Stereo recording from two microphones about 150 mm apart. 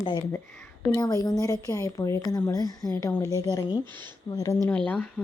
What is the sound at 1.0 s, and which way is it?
Speech, 25° left (ahead or behind).